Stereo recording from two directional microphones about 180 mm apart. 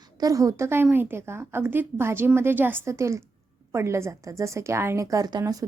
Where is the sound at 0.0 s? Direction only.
20° right (ahead or behind).